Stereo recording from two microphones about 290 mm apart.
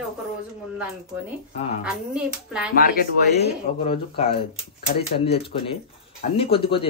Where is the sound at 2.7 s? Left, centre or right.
Left.